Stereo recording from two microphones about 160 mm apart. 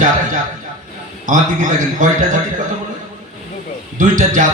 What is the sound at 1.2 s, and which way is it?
Speech, 55° right (ahead or behind).